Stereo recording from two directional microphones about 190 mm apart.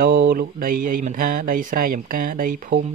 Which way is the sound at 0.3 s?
50° right (ahead or behind).